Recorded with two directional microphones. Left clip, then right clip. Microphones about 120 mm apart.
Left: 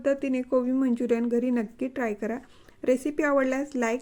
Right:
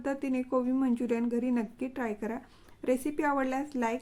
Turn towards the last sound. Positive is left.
turn(degrees=35)  # may be behind; listen again after turning